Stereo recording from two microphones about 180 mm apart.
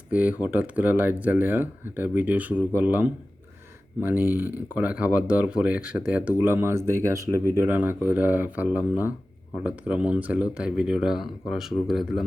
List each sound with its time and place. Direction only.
0.1 s speech: 10° right (ahead or behind)